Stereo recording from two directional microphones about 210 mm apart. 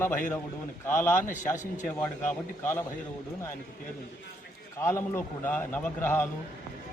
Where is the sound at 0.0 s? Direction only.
10° left (ahead or behind).